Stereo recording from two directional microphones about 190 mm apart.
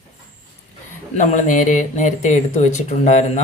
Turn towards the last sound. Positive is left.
turn(degrees=35)  # may be behind; listen again after turning